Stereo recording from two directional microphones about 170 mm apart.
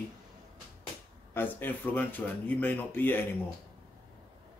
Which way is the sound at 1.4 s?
10° left (ahead or behind).